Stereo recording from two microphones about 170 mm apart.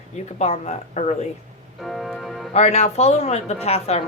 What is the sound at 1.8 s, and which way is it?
Organ, centre (ahead or behind).